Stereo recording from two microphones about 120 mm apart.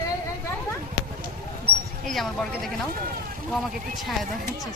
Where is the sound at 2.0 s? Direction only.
5° left (ahead or behind).